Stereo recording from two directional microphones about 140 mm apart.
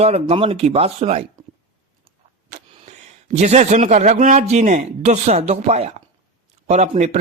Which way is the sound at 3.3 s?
55° right (ahead or behind).